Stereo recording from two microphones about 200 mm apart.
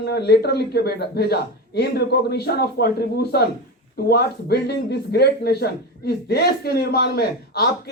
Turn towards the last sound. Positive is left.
turn(degrees=50)  # may be behind; listen again after turning